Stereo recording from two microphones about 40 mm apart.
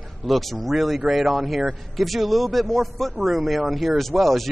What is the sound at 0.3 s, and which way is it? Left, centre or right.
A man's voice, centre.